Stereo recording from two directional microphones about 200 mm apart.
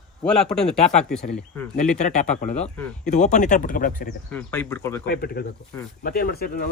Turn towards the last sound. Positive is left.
turn(degrees=50)  # may be behind; listen again after turning